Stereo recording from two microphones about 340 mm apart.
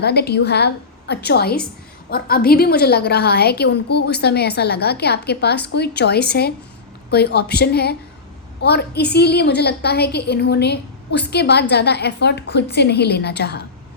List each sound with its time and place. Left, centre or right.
0.0 s a woman's voice: left